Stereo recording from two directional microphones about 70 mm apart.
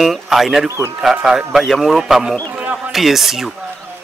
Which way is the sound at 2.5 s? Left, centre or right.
Right.